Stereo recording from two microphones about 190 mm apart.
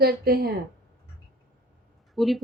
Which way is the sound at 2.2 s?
Centre (ahead or behind).